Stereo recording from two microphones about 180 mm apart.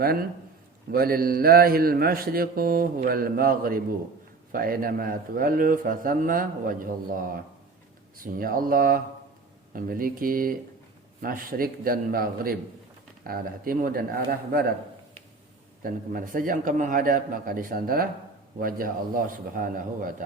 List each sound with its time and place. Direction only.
0.0 s a man's voice: 55° right (ahead or behind)
15.8 s a man's voice: 50° right (ahead or behind)